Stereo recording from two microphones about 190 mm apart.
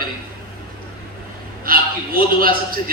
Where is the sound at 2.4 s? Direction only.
50° right (ahead or behind).